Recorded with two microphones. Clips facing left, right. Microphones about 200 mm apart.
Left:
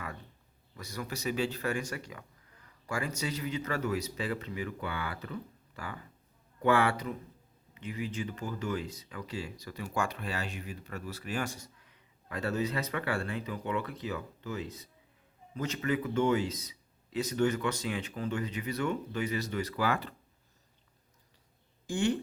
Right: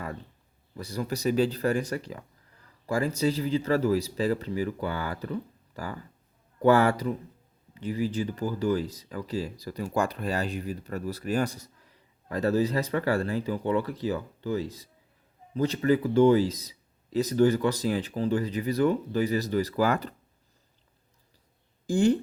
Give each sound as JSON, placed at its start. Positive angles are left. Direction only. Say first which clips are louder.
{"t": 0.8, "sound": "speech", "louder": "right 8 dB", "side_deg": -35}
{"t": 21.8, "sound": "speech", "louder": "right 7 dB", "side_deg": -35}